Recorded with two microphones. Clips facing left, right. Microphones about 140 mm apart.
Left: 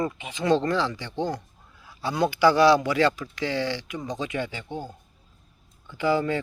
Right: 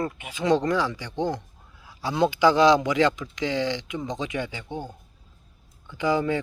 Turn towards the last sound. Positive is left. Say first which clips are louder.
# even
turn(degrees=-15)  # may be behind; listen again after turning